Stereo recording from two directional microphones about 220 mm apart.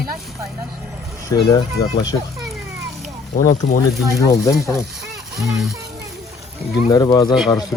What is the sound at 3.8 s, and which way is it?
Speech, 15° left (ahead or behind).